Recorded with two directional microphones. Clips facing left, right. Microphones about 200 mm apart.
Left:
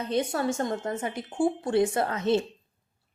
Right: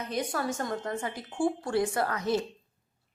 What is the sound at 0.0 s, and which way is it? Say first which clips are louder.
A woman's voice: left 5 dB; 25° left (ahead or behind).